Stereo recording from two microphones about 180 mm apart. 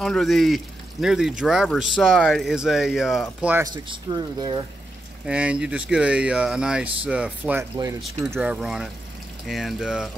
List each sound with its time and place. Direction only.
0.0 s speech: centre (ahead or behind)
3.7 s speech: 25° right (ahead or behind)
5.2 s speech: 5° right (ahead or behind)
8.3 s speech: 5° right (ahead or behind)